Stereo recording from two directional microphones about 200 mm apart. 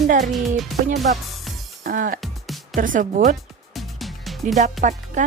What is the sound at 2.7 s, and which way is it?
Speech, 40° right (ahead or behind).